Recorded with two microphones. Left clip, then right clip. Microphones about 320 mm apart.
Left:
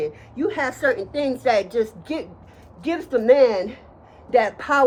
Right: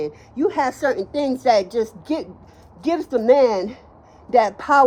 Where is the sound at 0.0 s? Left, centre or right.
Right.